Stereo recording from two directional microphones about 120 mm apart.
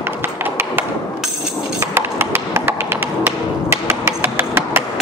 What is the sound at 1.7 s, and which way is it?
Music, 20° right (ahead or behind).